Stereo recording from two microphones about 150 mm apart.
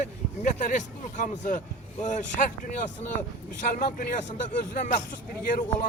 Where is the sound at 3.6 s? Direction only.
70° left (ahead or behind).